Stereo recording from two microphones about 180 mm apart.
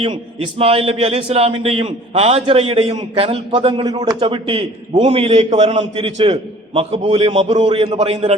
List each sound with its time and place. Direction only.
0.0 s a man's voice: 30° right (ahead or behind)